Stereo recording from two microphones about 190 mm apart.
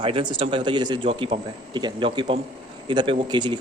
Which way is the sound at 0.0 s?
25° right (ahead or behind).